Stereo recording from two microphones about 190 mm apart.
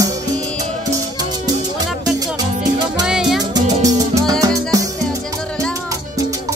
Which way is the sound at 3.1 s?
5° right (ahead or behind).